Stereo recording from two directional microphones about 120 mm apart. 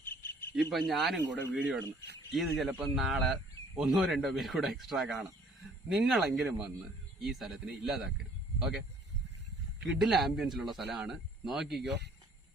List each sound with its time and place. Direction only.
0.0 s cricket: 20° left (ahead or behind)
0.5 s speech: centre (ahead or behind)
9.8 s speech: 5° right (ahead or behind)